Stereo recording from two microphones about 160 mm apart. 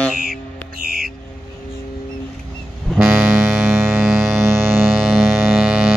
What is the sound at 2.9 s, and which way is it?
Vehicle, 10° right (ahead or behind).